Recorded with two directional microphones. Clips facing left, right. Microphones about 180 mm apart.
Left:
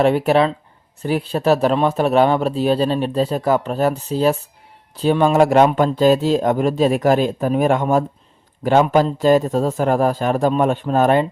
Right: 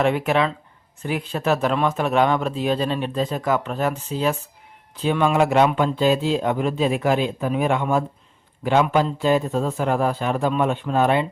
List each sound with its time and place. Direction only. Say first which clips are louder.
0.0 s speech: left 5 dB; 35° left (ahead or behind)